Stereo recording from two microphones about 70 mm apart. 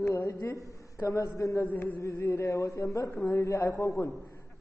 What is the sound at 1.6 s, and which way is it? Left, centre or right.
Speech, left.